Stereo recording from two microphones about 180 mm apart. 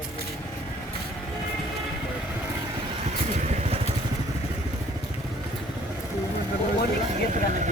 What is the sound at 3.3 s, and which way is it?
Vehicle, 35° right (ahead or behind).